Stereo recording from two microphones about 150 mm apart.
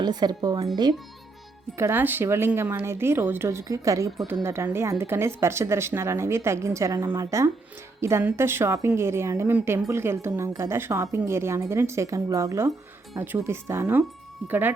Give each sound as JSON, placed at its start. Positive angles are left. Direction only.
{"t": 0.0, "sound": "a woman's voice", "side_deg": -25}
{"t": 1.7, "sound": "speech", "side_deg": -15}